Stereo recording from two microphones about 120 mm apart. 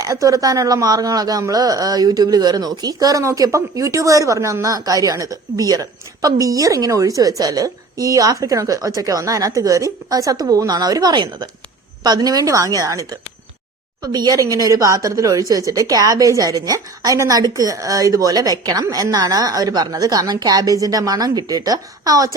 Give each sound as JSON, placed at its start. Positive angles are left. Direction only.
{"t": 0.0, "sound": "speech", "side_deg": -30}